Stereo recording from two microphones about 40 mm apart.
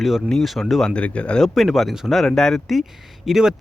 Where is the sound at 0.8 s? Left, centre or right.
Left.